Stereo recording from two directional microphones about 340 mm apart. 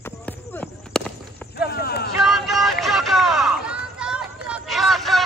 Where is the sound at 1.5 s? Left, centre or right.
Left.